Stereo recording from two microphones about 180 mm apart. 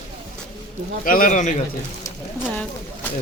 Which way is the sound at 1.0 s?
50° left (ahead or behind).